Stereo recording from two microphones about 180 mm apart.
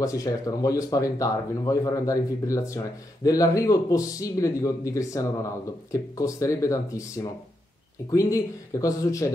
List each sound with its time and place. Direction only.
0.0 s speech: 20° left (ahead or behind)